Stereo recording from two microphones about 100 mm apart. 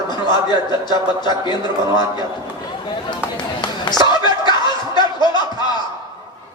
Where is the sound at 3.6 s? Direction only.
50° left (ahead or behind).